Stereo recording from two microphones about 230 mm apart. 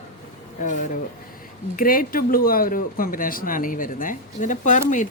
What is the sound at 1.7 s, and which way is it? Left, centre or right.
Speech, left.